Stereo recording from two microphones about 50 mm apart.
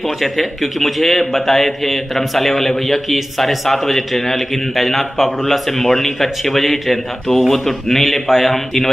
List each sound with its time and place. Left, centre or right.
0.2 s a man's voice: centre